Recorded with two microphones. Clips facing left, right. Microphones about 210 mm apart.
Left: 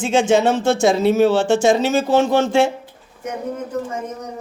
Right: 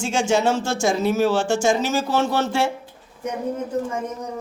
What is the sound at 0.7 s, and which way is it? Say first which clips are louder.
Speech: left 6 dB; 60° left (ahead or behind).